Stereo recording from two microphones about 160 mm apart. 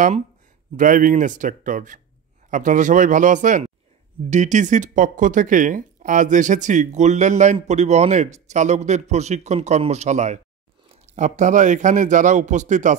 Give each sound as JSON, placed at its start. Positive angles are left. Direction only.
{"t": 0.7, "sound": "speech", "side_deg": -55}